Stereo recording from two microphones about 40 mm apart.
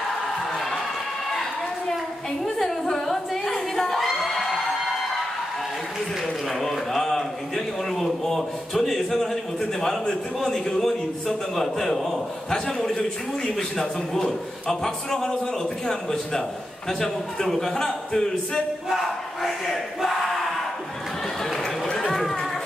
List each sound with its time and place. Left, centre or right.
2.4 s a sound: centre
6.6 s a sound: centre
10.0 s a man's voice: centre
10.8 s a man's voice: centre
18.9 s battle cry: centre
21.9 s run: centre